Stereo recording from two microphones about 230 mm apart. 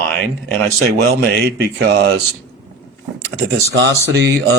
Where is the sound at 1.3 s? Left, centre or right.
Right.